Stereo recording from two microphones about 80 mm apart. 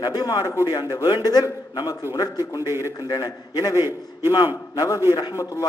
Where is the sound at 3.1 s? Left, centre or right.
Left.